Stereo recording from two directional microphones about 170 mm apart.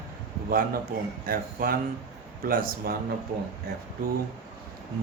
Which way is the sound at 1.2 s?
60° right (ahead or behind).